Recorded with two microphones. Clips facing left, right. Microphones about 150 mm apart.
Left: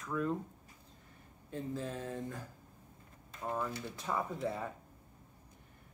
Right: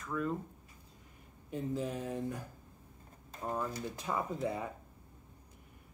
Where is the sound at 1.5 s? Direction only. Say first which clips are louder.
Right 3 dB; 15° right (ahead or behind).